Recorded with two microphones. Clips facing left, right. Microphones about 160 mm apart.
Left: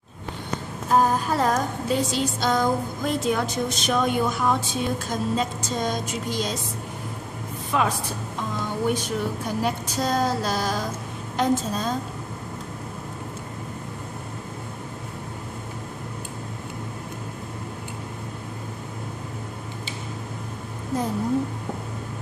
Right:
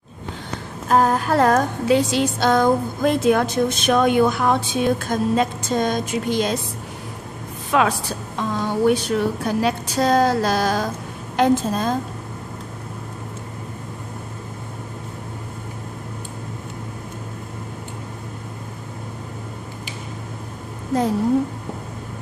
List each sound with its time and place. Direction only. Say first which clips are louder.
0.8 s a woman's voice: right 3 dB; 70° right (ahead or behind)
7.7 s a woman's voice: right 5 dB; 80° right; by 12.0 s 55° right (ahead or behind)